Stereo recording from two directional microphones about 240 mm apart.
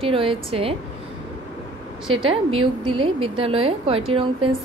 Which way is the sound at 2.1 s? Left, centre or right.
Right.